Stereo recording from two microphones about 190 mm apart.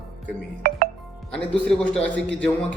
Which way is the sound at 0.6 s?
50° right (ahead or behind).